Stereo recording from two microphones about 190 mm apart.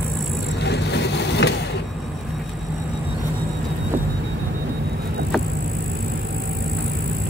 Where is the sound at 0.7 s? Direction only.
65° left (ahead or behind).